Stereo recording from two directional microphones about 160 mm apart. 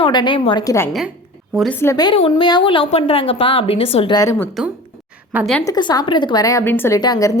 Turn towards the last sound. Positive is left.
turn(degrees=25)  # may be behind; listen again after turning